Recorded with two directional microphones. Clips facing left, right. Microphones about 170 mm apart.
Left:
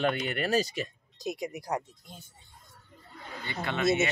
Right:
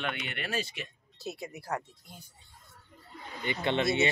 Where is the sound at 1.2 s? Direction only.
15° left (ahead or behind).